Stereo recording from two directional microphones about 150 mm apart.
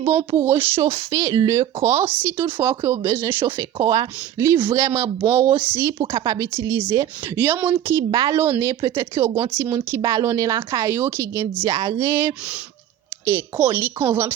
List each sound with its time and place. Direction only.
0.0 s speech: 15° right (ahead or behind)
8.1 s speech: 30° right (ahead or behind)
8.4 s speech: 15° right (ahead or behind)